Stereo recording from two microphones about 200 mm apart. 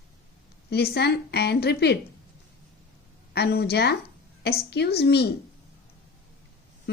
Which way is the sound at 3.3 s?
55° left (ahead or behind).